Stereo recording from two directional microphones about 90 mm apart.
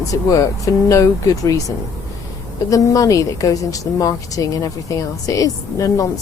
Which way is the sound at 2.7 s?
40° left (ahead or behind).